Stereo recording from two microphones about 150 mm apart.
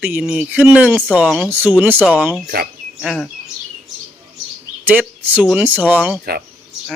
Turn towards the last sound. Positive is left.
turn(degrees=-10)  # may be behind; listen again after turning